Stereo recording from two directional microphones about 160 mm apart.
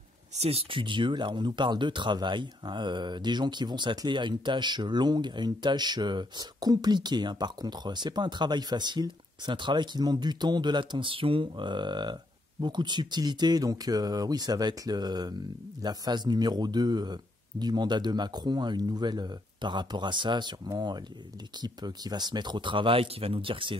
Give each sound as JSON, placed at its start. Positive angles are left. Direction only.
{"t": 0.4, "sound": "speech", "side_deg": -40}